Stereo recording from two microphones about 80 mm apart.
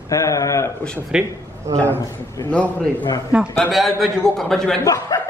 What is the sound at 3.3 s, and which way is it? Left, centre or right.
Speech, centre.